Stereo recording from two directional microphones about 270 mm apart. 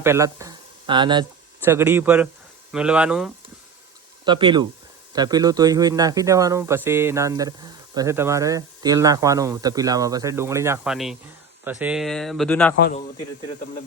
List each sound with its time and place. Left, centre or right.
0.0 s speech: centre
4.3 s speech: centre
12.8 s a man's voice: left